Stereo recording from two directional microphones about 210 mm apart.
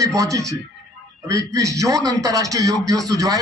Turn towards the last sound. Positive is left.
turn(degrees=-15)  # may be behind; listen again after turning